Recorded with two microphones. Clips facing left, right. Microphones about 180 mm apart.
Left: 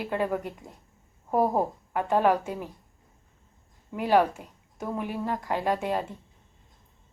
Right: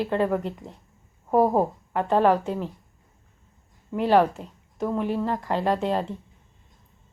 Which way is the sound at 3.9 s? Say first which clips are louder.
Right 3 dB; 10° left (ahead or behind).